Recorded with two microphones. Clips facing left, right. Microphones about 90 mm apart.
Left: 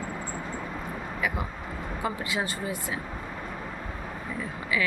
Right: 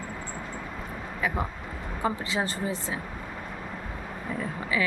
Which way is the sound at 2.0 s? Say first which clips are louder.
Right 3 dB; 35° right (ahead or behind).